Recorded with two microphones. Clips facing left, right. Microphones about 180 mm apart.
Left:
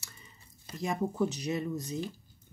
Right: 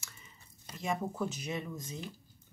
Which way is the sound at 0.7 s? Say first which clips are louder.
Left 4 dB; 35° left (ahead or behind).